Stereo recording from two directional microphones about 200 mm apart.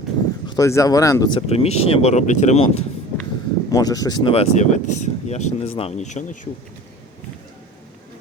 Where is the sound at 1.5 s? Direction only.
30° left (ahead or behind).